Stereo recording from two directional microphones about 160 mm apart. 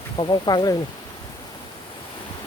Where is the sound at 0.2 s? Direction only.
30° left (ahead or behind).